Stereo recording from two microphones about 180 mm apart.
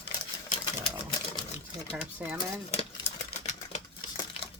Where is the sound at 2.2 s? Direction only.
10° right (ahead or behind).